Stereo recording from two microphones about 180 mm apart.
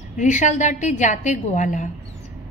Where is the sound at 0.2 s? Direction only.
45° left (ahead or behind).